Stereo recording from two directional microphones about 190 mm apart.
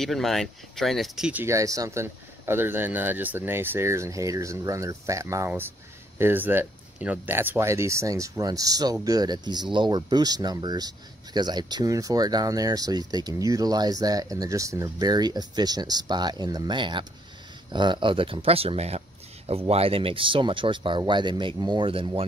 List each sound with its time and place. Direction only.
0.0 s speech: centre (ahead or behind); by 22.2 s 30° right (ahead or behind)